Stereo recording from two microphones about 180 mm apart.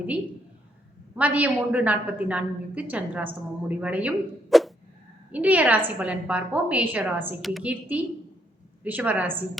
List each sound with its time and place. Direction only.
1.1 s a woman's voice: 10° right (ahead or behind)